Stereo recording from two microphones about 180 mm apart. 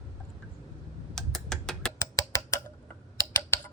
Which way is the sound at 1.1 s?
5° left (ahead or behind).